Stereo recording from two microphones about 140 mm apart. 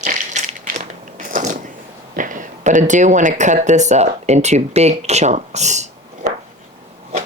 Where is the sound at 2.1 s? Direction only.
70° right (ahead or behind).